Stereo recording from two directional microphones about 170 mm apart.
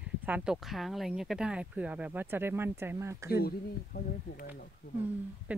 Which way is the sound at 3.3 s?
65° left (ahead or behind).